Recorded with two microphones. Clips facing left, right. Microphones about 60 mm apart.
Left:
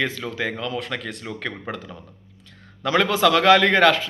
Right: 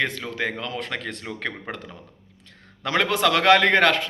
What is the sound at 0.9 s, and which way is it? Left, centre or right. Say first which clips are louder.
Speech: left 1 dB; right.